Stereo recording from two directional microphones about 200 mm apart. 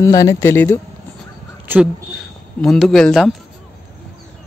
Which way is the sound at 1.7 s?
10° right (ahead or behind).